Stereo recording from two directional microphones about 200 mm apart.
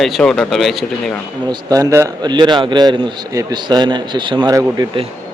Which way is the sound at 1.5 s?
20° right (ahead or behind).